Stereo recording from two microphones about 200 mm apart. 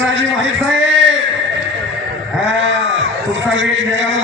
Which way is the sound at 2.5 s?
65° right (ahead or behind).